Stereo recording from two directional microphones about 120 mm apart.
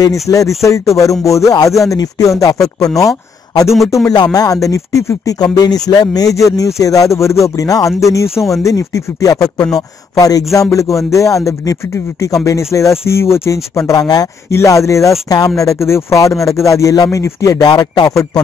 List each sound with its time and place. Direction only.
0.0 s speech: 30° left (ahead or behind)